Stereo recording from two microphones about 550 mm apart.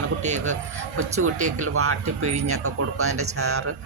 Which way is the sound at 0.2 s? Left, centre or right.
Centre.